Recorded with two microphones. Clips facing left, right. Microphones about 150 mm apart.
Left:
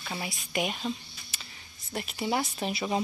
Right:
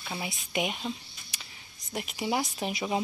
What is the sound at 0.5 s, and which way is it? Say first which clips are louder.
Cricket: left 1 dB; 10° right (ahead or behind).